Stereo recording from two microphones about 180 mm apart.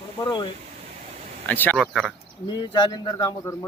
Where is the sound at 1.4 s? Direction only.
10° left (ahead or behind).